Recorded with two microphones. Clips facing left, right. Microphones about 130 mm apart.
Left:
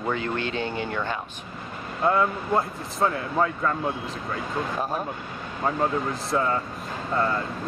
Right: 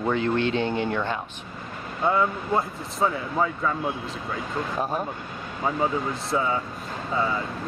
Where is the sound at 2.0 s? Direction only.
Centre (ahead or behind).